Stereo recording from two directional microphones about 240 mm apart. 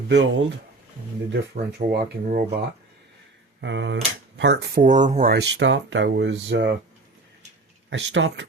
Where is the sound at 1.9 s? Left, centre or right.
Right.